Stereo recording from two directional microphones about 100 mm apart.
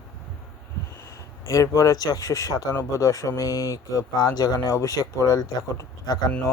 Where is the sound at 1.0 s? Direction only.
30° left (ahead or behind).